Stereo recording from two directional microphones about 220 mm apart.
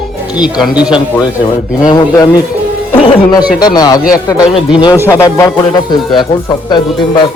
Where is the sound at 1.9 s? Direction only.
15° left (ahead or behind).